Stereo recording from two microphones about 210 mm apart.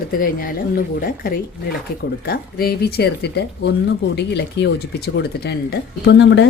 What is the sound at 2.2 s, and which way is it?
Speech, 45° left (ahead or behind).